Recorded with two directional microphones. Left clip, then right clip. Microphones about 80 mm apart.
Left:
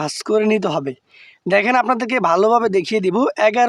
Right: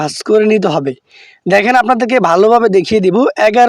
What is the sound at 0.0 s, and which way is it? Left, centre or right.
Speech, right.